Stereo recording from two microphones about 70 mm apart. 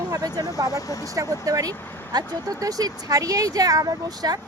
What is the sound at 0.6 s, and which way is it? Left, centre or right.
Speech, left.